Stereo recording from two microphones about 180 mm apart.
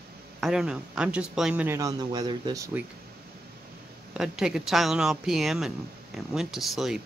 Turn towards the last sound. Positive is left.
turn(degrees=0)  # may be behind; listen again after turning